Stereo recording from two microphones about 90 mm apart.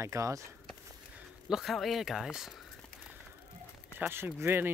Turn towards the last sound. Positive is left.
turn(degrees=-25)  # may be behind; listen again after turning